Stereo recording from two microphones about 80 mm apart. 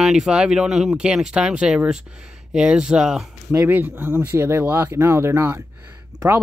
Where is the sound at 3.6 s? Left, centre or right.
Right.